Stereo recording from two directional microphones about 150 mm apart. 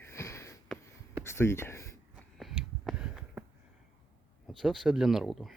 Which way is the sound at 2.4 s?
Centre (ahead or behind).